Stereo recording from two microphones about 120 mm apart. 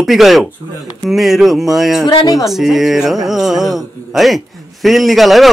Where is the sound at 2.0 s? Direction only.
30° left (ahead or behind).